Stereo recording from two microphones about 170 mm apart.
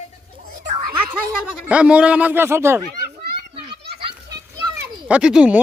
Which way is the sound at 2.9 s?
65° right (ahead or behind).